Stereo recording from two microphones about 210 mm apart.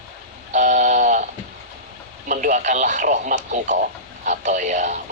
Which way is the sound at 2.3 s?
35° right (ahead or behind).